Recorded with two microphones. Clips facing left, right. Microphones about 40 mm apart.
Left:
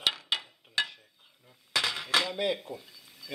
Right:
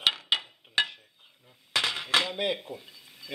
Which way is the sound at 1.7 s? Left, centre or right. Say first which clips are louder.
Right 2 dB; centre.